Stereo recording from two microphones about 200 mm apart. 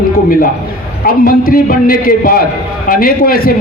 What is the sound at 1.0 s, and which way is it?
A man's voice, 45° left (ahead or behind).